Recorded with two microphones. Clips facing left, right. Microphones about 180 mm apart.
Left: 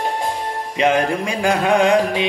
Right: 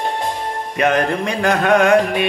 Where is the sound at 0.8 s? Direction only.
10° left (ahead or behind).